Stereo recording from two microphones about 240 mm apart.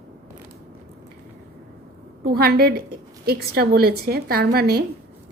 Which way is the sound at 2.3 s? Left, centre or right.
Right.